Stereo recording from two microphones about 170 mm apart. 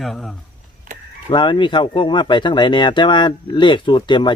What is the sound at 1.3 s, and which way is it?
Speech, 30° left (ahead or behind).